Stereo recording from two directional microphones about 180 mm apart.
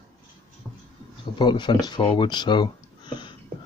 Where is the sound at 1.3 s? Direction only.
25° left (ahead or behind).